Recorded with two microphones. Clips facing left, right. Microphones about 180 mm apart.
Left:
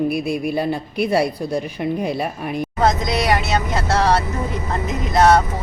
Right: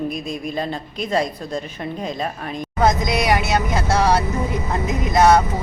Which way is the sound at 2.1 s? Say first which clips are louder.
Left 3 dB; 10° left (ahead or behind).